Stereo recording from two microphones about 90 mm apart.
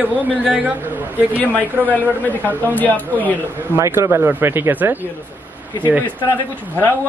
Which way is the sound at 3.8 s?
30° right (ahead or behind).